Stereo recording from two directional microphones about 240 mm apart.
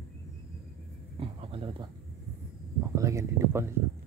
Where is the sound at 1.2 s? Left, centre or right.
Right.